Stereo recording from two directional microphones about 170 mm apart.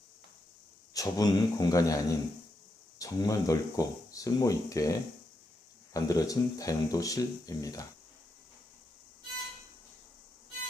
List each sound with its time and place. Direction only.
0.9 s speech: 20° left (ahead or behind)